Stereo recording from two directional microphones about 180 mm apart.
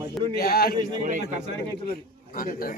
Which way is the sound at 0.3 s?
60° left (ahead or behind).